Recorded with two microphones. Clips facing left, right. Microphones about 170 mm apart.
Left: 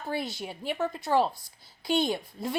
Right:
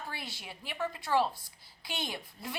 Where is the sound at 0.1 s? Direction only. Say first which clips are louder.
Left 11 dB; 45° left (ahead or behind).